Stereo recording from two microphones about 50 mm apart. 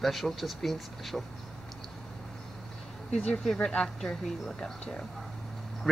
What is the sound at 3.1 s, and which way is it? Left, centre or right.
Speech, centre.